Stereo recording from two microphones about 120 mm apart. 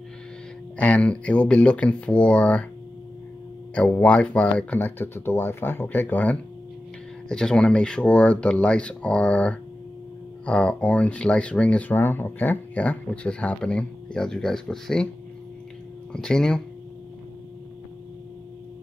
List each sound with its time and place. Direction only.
0.7 s speech: 10° left (ahead or behind)
4.0 s speech: 10° left (ahead or behind)
16.1 s speech: 5° left (ahead or behind)